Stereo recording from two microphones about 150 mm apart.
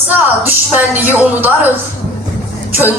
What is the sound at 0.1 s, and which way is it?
Speech, 10° right (ahead or behind).